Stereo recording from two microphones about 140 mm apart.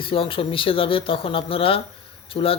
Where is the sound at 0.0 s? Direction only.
40° left (ahead or behind).